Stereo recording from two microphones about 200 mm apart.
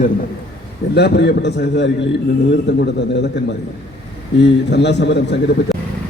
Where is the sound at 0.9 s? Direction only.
55° left (ahead or behind).